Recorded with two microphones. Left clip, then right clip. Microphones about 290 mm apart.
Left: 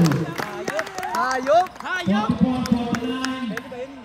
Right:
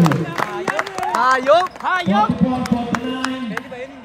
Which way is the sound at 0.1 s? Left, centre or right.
Centre.